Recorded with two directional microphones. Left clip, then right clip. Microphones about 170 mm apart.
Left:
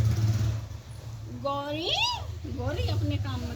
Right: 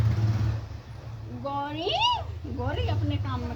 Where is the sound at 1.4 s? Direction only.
20° right (ahead or behind).